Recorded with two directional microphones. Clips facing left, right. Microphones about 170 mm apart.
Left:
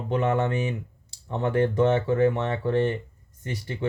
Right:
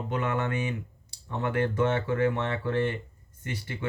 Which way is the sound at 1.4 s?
30° left (ahead or behind).